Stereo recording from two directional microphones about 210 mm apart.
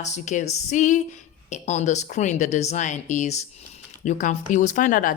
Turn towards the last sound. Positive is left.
turn(degrees=40)  # may be behind; listen again after turning